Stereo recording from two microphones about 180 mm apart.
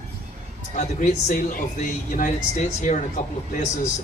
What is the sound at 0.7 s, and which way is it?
Speech, 45° left (ahead or behind).